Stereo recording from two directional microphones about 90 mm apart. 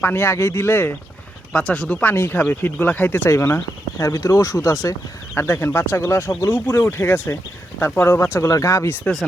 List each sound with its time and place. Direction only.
0.0 s speech: 25° left (ahead or behind)
1.5 s speech: 15° left (ahead or behind)
3.2 s speech: 30° left (ahead or behind)